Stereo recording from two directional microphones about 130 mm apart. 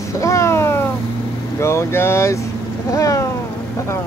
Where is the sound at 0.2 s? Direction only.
25° left (ahead or behind).